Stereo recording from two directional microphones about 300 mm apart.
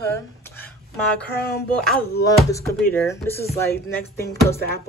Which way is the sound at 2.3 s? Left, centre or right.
Centre.